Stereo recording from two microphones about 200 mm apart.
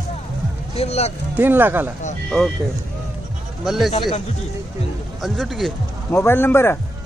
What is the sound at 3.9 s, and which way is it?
Speech, 30° left (ahead or behind).